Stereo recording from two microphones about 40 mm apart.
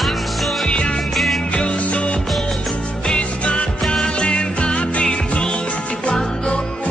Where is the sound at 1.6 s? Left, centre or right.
Left.